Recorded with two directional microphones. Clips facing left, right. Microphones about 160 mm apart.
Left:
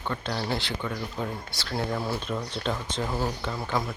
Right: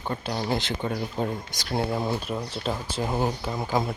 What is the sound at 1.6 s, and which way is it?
Speech, 20° right (ahead or behind).